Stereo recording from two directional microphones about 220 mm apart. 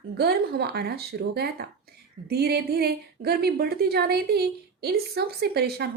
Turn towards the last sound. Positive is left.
turn(degrees=-45)  # may be behind; listen again after turning